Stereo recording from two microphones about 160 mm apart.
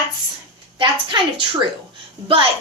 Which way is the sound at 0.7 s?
30° right (ahead or behind).